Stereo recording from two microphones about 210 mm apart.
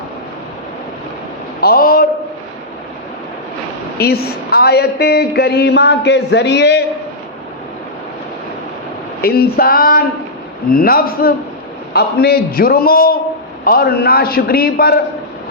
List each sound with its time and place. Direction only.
1.6 s a sound: 45° left (ahead or behind)
3.9 s a man's voice: 50° left (ahead or behind)
9.2 s a man's voice: 45° left (ahead or behind)